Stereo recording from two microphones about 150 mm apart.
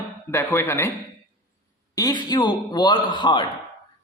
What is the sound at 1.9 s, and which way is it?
A man's voice, 25° left (ahead or behind).